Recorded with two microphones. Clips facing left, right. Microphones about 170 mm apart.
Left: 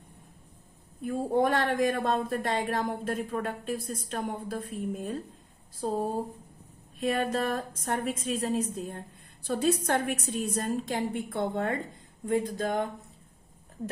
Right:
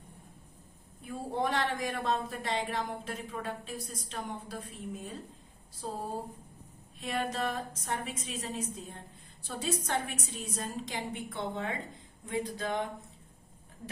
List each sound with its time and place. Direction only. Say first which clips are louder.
1.0 s speech: left 7 dB; 50° left (ahead or behind)
7.0 s a woman's voice: left 6 dB; 50° left (ahead or behind)